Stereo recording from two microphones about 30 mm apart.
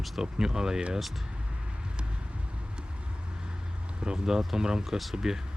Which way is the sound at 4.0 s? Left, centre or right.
Right.